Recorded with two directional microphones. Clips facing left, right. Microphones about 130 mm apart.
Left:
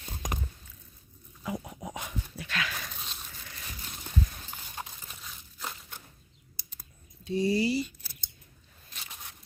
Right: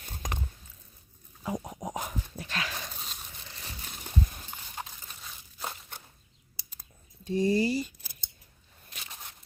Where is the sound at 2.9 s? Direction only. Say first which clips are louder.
Even; centre (ahead or behind).